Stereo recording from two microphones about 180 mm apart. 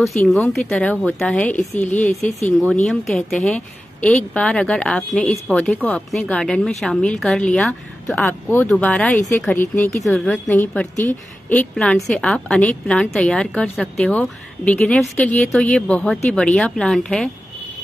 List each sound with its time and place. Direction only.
0.2 s a woman's voice: centre (ahead or behind)
1.9 s speech: 45° left (ahead or behind)
2.6 s a woman's voice: centre (ahead or behind)